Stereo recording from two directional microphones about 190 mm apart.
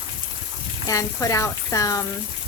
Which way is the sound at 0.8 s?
15° left (ahead or behind).